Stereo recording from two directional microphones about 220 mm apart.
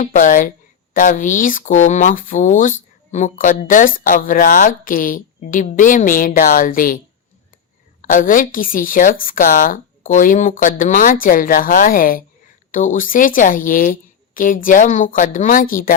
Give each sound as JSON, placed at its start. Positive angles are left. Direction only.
{"t": 0.0, "sound": "a woman's voice", "side_deg": 35}
{"t": 8.0, "sound": "a woman's voice", "side_deg": 40}